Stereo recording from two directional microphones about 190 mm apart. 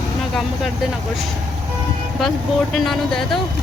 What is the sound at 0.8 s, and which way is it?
Speech, centre (ahead or behind).